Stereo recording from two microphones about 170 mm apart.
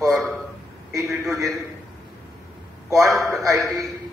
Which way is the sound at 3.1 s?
Centre (ahead or behind).